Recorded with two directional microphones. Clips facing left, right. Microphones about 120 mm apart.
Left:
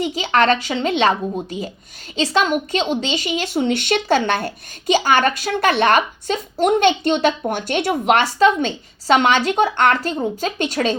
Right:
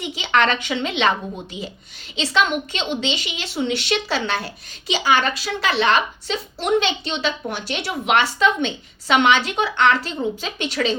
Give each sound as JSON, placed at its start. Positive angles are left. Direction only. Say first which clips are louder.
{"t": 0.0, "sound": "a woman's voice", "louder": "left 3 dB", "side_deg": 40}